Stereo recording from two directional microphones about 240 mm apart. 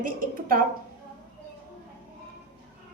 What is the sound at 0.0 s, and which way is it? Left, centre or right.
Speech, right.